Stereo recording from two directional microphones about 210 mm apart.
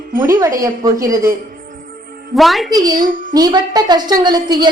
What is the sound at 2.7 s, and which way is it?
A woman's voice, 20° right (ahead or behind).